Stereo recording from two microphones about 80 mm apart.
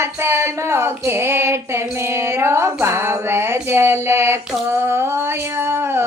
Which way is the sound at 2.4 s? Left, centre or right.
Right.